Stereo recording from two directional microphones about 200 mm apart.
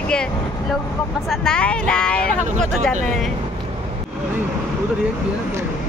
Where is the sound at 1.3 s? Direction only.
5° left (ahead or behind).